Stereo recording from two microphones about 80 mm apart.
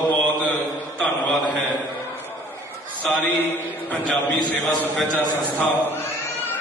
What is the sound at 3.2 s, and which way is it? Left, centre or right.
A man's voice, left.